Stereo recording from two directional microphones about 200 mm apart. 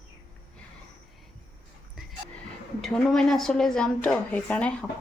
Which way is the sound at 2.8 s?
5° left (ahead or behind).